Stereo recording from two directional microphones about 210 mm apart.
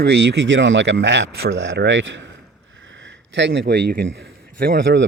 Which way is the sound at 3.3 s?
55° right (ahead or behind).